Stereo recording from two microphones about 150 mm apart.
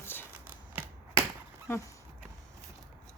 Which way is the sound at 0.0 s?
15° left (ahead or behind).